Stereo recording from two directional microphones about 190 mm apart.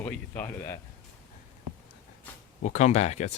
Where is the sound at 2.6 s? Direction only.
40° left (ahead or behind).